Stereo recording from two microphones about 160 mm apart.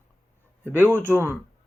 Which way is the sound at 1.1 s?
15° right (ahead or behind).